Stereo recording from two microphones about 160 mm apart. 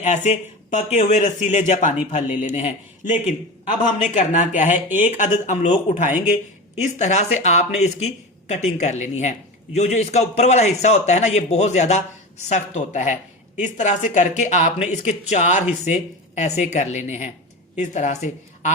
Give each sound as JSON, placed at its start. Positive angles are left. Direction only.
{"t": 0.0, "sound": "speech", "side_deg": 50}